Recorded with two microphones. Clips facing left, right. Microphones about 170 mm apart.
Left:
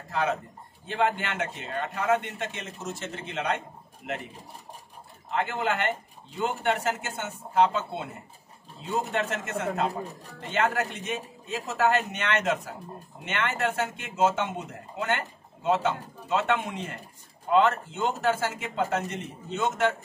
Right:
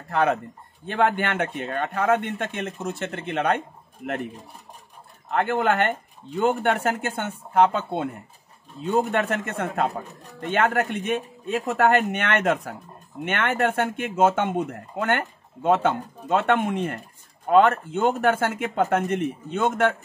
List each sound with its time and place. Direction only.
0.1 s speech: 60° right (ahead or behind)
5.3 s speech: 55° right (ahead or behind)